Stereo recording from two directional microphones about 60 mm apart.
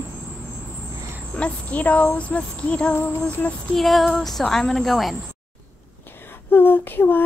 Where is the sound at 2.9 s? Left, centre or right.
Left.